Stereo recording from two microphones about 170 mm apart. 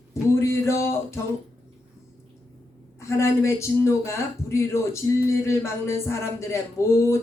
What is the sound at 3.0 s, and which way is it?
A woman's voice, 15° left (ahead or behind).